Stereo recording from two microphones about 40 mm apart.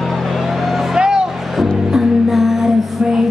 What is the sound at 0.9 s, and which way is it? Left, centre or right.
Music, centre.